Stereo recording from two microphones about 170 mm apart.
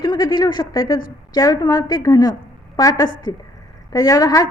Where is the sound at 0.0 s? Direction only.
25° left (ahead or behind).